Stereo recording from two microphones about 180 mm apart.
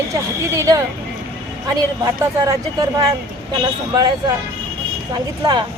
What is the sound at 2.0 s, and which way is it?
Speech, 20° right (ahead or behind).